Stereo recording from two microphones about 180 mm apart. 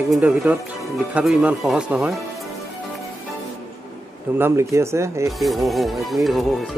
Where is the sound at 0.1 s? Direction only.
5° right (ahead or behind).